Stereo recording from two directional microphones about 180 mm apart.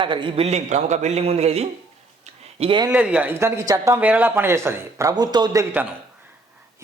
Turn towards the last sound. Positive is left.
turn(degrees=-10)  # may be behind; listen again after turning